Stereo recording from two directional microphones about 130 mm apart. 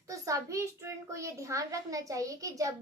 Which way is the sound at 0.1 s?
25° right (ahead or behind).